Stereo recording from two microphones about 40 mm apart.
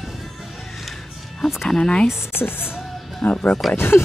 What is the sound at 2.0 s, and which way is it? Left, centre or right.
Speech, left.